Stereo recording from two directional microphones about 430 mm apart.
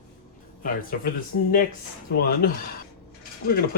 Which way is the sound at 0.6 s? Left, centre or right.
Centre.